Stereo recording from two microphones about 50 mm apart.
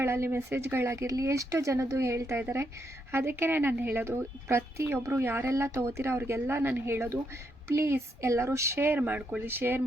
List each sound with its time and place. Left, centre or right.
0.0 s speech: right
3.1 s speech: right
4.0 s speech: right
9.0 s speech: right
9.5 s speech: right